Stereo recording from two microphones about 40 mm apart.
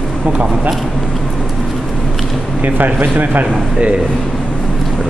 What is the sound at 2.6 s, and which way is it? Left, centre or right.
Speech, right.